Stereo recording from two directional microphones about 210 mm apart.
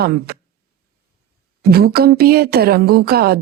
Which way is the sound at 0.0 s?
45° right (ahead or behind).